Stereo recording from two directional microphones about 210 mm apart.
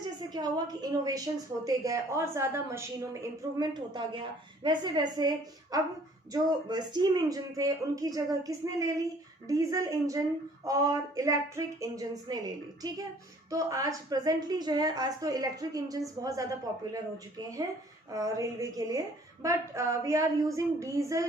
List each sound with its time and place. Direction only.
0.0 s a woman's voice: 20° right (ahead or behind)
13.5 s a woman's voice: 15° right (ahead or behind)